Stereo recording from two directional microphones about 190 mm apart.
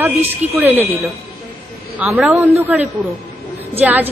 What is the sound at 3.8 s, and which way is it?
Speech, 10° right (ahead or behind).